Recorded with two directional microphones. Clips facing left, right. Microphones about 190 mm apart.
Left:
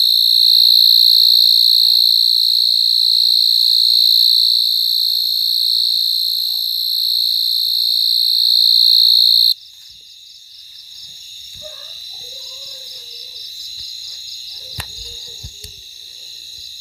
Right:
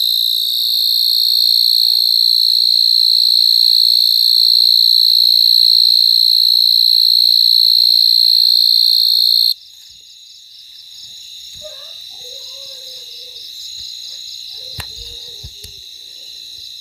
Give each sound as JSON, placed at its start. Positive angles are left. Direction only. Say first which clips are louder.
{"t": 0.3, "sound": "cricket", "louder": "left 5 dB", "side_deg": -50}
{"t": 8.0, "sound": "cricket", "louder": "right 4 dB", "side_deg": -30}
{"t": 8.3, "sound": "insect", "louder": "right 1 dB", "side_deg": -65}